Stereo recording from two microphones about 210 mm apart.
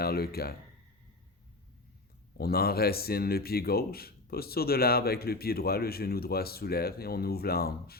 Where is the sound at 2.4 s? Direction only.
45° left (ahead or behind).